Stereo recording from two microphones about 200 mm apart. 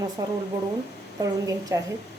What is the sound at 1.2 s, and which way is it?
Speech, 15° right (ahead or behind).